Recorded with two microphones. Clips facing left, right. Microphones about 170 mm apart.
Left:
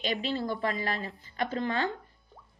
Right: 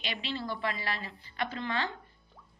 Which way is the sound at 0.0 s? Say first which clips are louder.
Left 6 dB; 45° left (ahead or behind).